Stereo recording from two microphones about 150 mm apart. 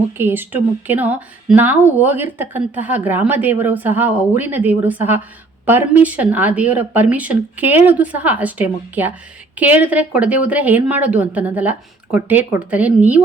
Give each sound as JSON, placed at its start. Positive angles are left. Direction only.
{"t": 0.2, "sound": "speech", "side_deg": -15}